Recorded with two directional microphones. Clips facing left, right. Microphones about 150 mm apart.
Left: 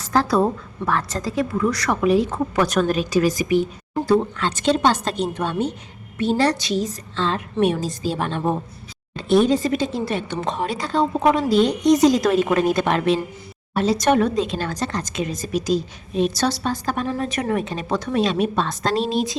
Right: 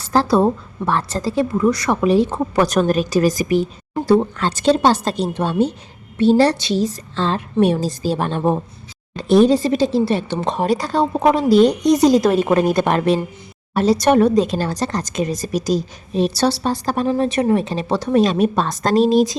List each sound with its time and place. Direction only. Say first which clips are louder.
0.0 s a woman's voice: right 3 dB; 30° right (ahead or behind)